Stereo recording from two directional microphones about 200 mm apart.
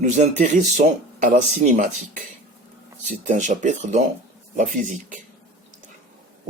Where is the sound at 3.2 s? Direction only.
40° right (ahead or behind).